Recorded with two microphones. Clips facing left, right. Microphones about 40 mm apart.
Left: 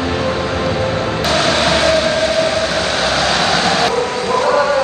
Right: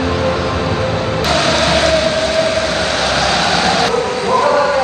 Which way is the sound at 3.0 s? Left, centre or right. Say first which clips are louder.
Even; centre.